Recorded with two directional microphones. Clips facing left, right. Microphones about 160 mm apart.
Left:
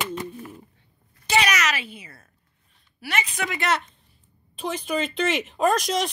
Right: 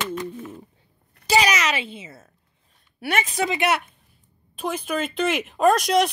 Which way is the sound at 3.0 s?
50° right (ahead or behind).